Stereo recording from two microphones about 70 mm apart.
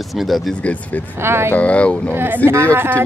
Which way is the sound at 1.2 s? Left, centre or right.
Right.